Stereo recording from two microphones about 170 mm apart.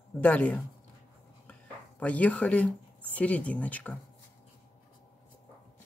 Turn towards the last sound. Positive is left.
turn(degrees=10)  # may be behind; listen again after turning